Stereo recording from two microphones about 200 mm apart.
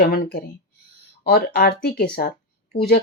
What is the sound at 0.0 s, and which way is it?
Speech, 50° left (ahead or behind).